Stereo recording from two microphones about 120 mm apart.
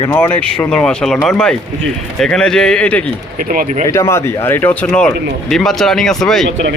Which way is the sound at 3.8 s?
25° left (ahead or behind).